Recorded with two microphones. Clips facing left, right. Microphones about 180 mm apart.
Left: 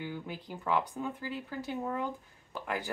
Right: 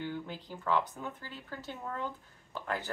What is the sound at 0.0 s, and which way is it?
Speech, 10° left (ahead or behind).